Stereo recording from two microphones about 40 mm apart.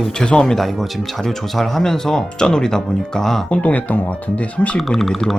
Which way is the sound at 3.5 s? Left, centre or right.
Left.